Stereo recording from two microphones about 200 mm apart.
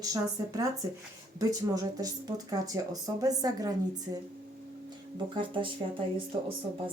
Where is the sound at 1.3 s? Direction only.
20° right (ahead or behind).